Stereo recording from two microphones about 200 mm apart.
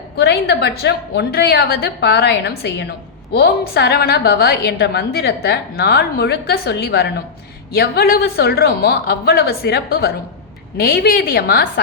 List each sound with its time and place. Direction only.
0.2 s a woman's voice: 55° left (ahead or behind)